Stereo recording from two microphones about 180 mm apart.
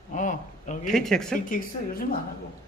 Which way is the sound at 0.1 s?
45° left (ahead or behind).